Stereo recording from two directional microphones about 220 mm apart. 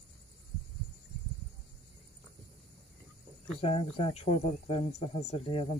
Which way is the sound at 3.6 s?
25° left (ahead or behind).